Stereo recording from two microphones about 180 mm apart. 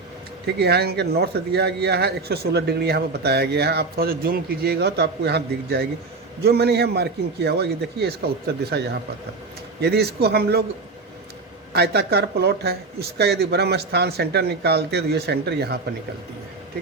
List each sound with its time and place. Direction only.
0.4 s speech: 65° right (ahead or behind)
11.7 s speech: 65° right (ahead or behind)